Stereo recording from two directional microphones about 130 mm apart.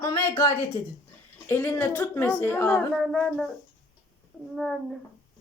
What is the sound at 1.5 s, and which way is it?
Speech, 15° left (ahead or behind).